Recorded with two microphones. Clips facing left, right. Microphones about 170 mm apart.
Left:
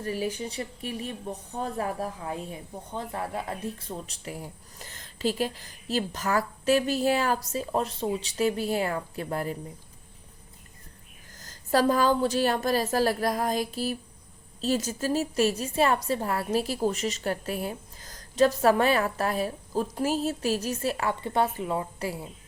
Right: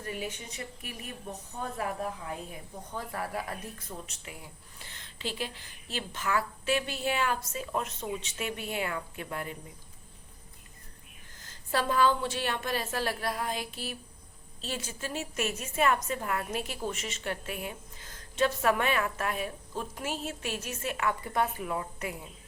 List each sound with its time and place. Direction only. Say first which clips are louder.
0.0 s speech: left 7 dB; 35° left (ahead or behind)
11.3 s speech: left 7 dB; 40° left (ahead or behind)